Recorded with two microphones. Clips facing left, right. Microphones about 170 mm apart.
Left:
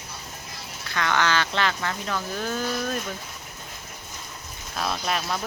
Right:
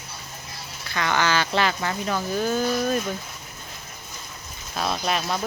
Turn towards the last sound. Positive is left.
turn(degrees=-5)  # may be behind; listen again after turning